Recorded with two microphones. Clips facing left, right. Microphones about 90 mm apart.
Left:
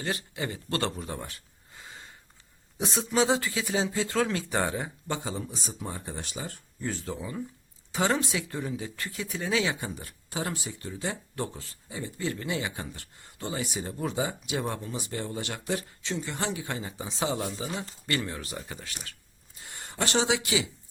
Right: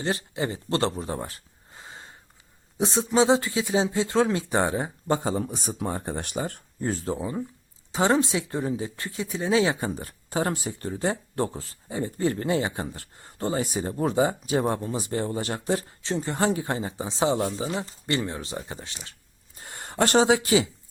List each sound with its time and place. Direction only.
0.0 s speech: 30° right (ahead or behind); by 6.6 s 55° right (ahead or behind)
6.7 s speech: 40° right (ahead or behind)
19.5 s speech: 45° right (ahead or behind)